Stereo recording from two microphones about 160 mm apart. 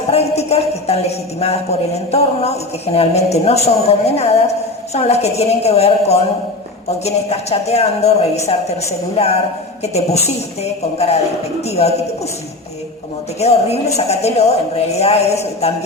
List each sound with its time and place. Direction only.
0.1 s speech: 40° left (ahead or behind)
13.4 s speech: 40° left (ahead or behind)